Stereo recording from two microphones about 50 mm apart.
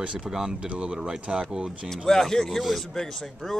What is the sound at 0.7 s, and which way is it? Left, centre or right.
Speech, right.